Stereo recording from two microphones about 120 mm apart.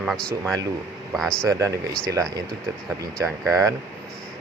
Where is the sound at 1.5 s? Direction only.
25° right (ahead or behind).